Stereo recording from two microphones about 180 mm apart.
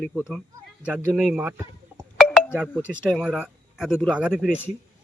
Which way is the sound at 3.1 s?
Centre (ahead or behind).